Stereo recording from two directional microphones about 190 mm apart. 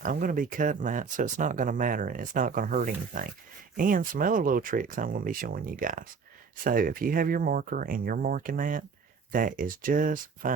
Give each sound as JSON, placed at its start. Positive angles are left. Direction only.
{"t": 0.0, "sound": "speech", "side_deg": -45}